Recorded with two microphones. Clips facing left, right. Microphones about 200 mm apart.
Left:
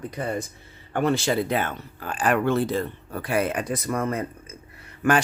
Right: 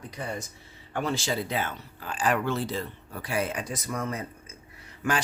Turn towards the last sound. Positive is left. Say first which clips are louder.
# left 7 dB
turn(degrees=60)  # may be behind; listen again after turning